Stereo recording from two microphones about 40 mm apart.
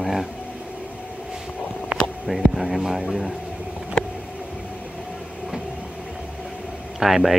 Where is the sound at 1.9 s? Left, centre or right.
Right.